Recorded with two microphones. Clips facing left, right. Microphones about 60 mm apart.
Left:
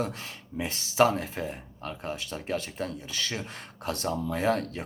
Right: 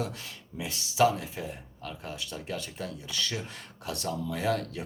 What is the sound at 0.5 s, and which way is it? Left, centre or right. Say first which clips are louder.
Speech: left 6 dB; left.